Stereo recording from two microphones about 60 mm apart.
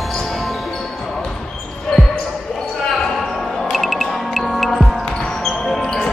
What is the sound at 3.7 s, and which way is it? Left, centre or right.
Music, centre.